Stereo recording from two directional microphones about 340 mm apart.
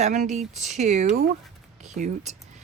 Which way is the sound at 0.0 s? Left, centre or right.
Right.